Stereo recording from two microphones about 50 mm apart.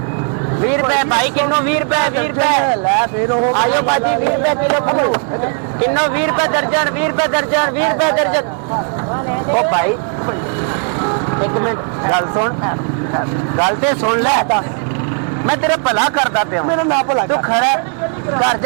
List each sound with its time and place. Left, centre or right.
0.6 s a man's voice: centre
11.0 s a man's voice: centre